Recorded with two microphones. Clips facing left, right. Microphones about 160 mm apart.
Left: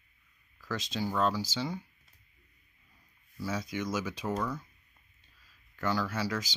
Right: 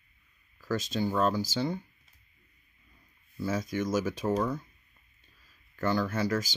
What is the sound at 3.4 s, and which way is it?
Speech, 50° right (ahead or behind).